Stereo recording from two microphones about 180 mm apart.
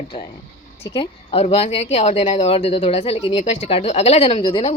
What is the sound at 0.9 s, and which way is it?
A woman's voice, 35° left (ahead or behind).